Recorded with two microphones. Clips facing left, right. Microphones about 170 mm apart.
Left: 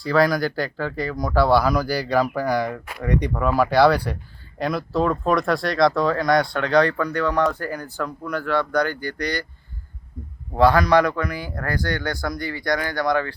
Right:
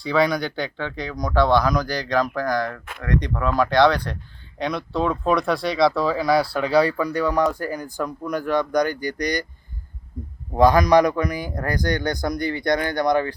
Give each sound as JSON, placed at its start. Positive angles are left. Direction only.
{"t": 0.0, "sound": "speech", "side_deg": 0}
{"t": 10.5, "sound": "a man's voice", "side_deg": -15}